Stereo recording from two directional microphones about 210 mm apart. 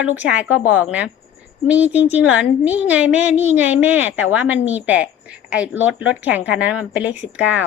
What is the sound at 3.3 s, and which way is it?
Child singing, 30° left (ahead or behind).